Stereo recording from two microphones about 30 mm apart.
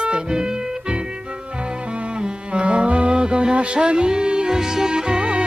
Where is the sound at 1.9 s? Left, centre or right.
Right.